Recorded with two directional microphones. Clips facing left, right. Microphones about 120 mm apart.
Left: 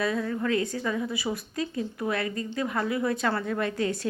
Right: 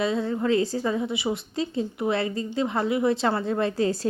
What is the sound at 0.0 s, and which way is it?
A woman's voice, 25° right (ahead or behind).